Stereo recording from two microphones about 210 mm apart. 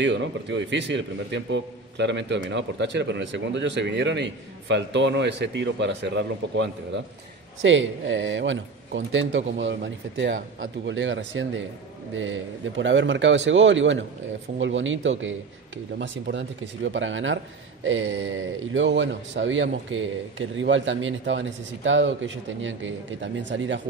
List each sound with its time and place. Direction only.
0.0 s a man's voice: 55° right (ahead or behind)